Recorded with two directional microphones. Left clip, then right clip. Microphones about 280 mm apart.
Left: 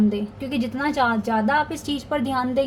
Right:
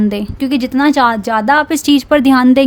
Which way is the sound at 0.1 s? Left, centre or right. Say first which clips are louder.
Right 10 dB; right.